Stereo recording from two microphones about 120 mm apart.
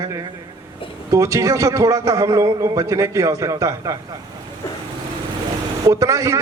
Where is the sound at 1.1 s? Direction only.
25° right (ahead or behind).